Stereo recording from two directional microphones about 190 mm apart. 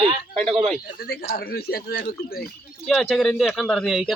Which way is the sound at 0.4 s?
30° right (ahead or behind).